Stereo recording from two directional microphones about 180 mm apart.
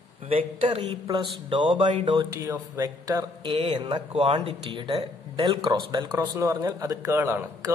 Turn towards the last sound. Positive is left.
turn(degrees=-15)  # may be behind; listen again after turning